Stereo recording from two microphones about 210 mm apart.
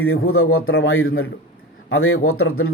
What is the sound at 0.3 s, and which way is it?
A man's voice, 85° left.